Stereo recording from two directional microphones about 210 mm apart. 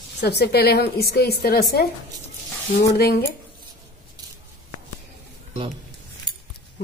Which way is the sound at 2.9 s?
50° left (ahead or behind).